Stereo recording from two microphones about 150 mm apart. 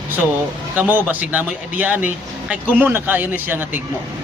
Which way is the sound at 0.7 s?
10° right (ahead or behind).